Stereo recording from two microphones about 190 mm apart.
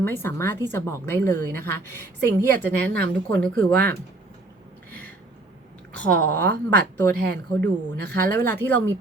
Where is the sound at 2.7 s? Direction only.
60° right (ahead or behind).